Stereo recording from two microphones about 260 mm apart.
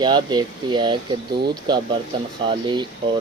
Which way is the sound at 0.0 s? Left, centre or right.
Centre.